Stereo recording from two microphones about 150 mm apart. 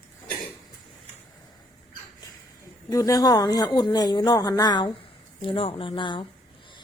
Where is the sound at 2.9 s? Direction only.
20° left (ahead or behind).